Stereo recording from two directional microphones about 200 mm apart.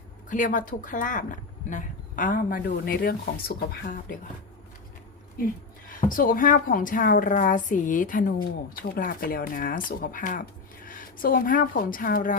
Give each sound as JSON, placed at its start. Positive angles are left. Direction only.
{"t": 0.3, "sound": "a woman's voice", "side_deg": 40}
{"t": 6.1, "sound": "a woman's voice", "side_deg": 45}